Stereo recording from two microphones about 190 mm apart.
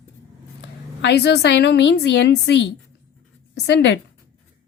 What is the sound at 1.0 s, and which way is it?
A woman's voice, 60° left (ahead or behind).